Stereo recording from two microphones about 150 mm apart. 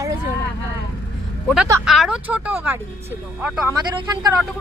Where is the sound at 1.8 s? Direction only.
Centre (ahead or behind).